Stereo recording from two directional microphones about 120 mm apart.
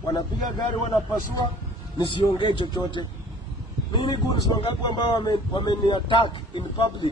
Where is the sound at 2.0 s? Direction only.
40° left (ahead or behind).